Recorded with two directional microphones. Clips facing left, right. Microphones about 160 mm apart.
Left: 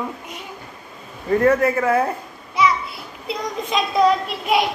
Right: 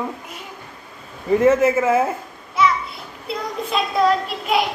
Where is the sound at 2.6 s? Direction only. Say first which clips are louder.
Even; centre (ahead or behind).